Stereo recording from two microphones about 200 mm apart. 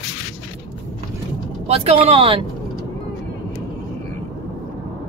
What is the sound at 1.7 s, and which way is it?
Speech, 30° right (ahead or behind).